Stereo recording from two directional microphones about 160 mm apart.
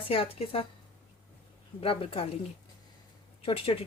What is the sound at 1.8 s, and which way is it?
Speech, 35° left (ahead or behind).